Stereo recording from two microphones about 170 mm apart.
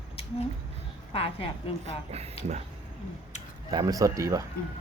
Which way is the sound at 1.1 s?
35° left (ahead or behind).